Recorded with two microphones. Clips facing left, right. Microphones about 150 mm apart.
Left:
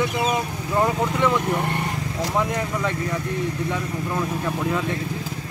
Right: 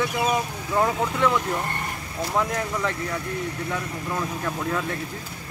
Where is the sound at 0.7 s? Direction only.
10° left (ahead or behind).